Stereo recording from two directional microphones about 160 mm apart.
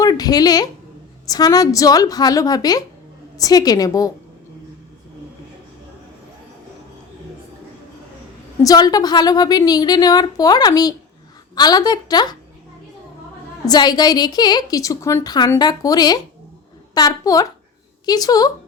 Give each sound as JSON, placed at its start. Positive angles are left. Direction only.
{"t": 0.0, "sound": "a woman's voice", "side_deg": 25}
{"t": 8.6, "sound": "a woman's voice", "side_deg": 25}
{"t": 13.7, "sound": "a woman's voice", "side_deg": 25}